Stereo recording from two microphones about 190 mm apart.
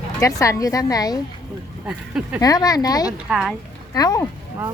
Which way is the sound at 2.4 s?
20° left (ahead or behind).